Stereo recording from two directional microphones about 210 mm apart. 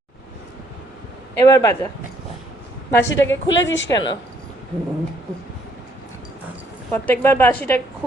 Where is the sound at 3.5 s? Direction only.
60° left (ahead or behind).